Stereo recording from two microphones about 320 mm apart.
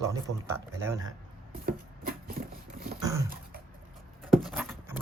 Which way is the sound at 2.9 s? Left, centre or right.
Centre.